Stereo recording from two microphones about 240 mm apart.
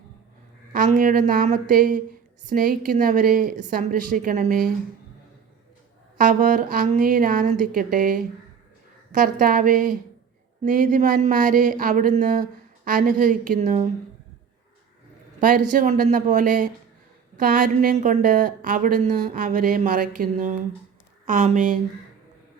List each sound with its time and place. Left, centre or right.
0.7 s a woman's voice: right
6.1 s a woman's voice: right
15.4 s a woman's voice: right